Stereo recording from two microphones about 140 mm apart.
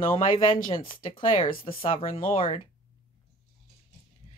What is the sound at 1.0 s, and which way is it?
Speech, 40° left (ahead or behind).